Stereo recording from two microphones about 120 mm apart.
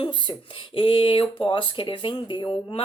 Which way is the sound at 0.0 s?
40° left (ahead or behind).